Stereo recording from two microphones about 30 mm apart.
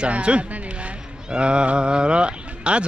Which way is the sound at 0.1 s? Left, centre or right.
Right.